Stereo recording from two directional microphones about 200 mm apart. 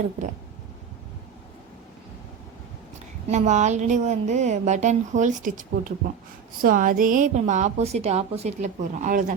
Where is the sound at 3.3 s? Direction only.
35° right (ahead or behind).